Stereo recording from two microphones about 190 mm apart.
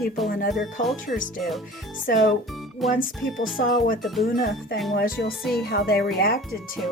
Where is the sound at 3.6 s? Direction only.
45° left (ahead or behind).